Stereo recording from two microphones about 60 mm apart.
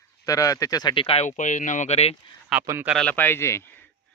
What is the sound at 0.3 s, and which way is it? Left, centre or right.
Speech, left.